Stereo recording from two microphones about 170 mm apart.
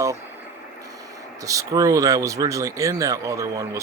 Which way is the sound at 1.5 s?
20° right (ahead or behind).